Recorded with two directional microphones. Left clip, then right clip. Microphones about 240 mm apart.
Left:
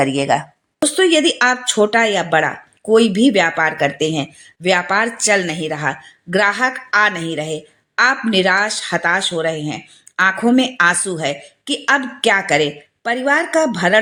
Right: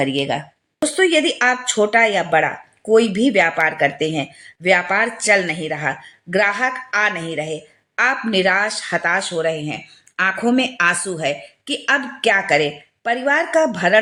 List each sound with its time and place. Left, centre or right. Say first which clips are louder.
0.0 s speech: left 4 dB; centre
0.9 s speech: left 2 dB; centre